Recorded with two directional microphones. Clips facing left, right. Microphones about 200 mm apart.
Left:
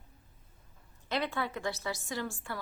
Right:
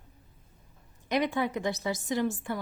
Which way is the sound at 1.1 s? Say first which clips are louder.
Right 6 dB; 15° right (ahead or behind).